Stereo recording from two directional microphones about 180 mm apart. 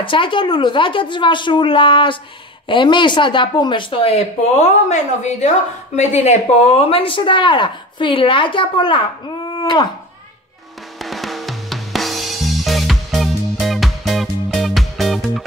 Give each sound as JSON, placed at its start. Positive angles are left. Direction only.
{"t": 0.0, "sound": "speech", "side_deg": 30}
{"t": 9.5, "sound": "a sound", "side_deg": 25}
{"t": 11.1, "sound": "drum kit", "side_deg": 0}